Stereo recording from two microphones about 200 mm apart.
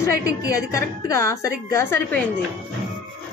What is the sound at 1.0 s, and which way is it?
A woman's voice, 15° left (ahead or behind).